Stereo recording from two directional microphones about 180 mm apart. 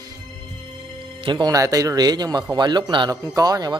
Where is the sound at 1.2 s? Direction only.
25° right (ahead or behind).